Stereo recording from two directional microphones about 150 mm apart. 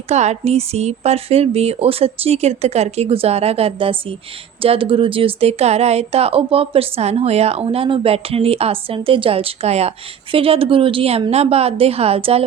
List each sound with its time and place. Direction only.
0.1 s a woman's voice: 45° right (ahead or behind)